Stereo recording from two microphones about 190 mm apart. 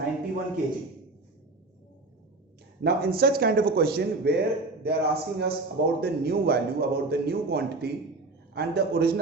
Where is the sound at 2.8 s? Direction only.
55° right (ahead or behind).